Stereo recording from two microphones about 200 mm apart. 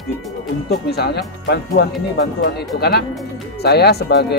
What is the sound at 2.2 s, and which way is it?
Speech, 55° left (ahead or behind).